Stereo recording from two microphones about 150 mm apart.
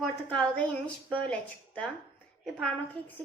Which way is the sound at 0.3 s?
10° left (ahead or behind).